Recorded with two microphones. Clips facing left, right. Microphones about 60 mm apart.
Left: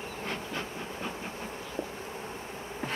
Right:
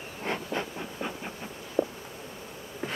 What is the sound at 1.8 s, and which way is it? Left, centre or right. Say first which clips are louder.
Insect: right 10 dB; right.